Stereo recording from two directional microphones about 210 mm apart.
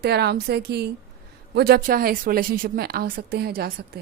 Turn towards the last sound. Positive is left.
turn(degrees=-50)  # may be behind; listen again after turning